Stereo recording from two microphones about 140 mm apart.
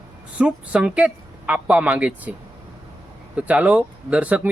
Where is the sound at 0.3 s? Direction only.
10° right (ahead or behind).